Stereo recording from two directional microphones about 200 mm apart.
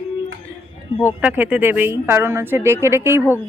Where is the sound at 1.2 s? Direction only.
10° right (ahead or behind).